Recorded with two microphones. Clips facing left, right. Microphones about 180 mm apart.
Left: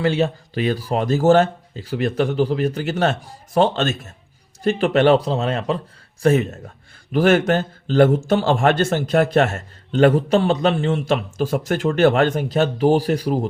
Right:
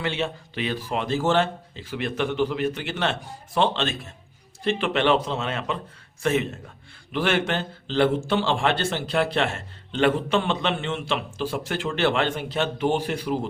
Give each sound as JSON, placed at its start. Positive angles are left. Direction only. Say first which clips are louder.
{"t": 0.0, "sound": "a man's voice", "louder": "left 8 dB", "side_deg": 40}